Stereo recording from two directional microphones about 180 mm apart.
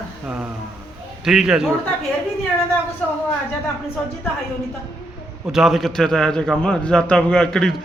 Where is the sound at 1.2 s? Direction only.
5° right (ahead or behind).